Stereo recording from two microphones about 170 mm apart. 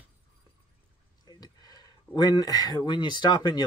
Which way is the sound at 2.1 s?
25° left (ahead or behind).